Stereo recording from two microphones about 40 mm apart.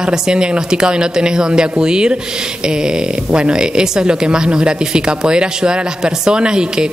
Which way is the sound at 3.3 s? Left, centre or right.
Right.